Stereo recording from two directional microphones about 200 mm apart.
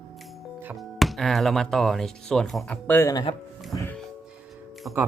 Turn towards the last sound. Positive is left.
turn(degrees=-15)  # may be behind; listen again after turning